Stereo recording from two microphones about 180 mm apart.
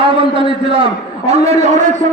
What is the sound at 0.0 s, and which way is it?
A man's voice, 30° right (ahead or behind).